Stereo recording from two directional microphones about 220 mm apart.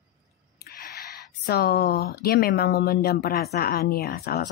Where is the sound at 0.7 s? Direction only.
45° left (ahead or behind).